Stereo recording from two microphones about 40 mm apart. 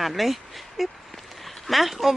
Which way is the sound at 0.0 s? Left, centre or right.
Centre.